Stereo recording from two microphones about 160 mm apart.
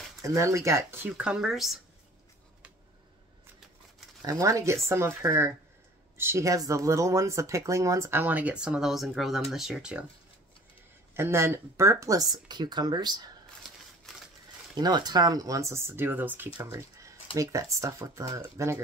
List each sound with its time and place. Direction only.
0.2 s speech: 20° right (ahead or behind); by 1.8 s centre (ahead or behind)
4.2 s speech: 20° right (ahead or behind)
11.1 s speech: 15° right (ahead or behind)
14.8 s speech: 25° right (ahead or behind)